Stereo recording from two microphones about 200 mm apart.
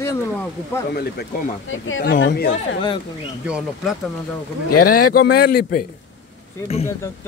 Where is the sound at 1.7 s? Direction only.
75° left (ahead or behind).